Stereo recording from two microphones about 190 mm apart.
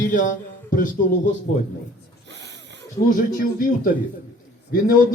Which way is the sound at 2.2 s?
70° right (ahead or behind).